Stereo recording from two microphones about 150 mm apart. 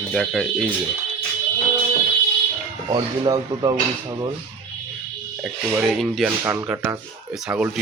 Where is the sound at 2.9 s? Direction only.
30° right (ahead or behind).